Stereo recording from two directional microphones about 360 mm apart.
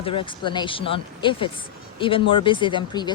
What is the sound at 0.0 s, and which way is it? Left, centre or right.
Speech, centre.